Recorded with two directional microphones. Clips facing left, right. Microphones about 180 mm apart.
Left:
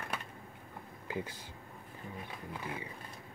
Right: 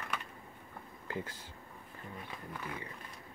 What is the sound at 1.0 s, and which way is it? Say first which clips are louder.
Speech: left 1 dB; 15° left (ahead or behind).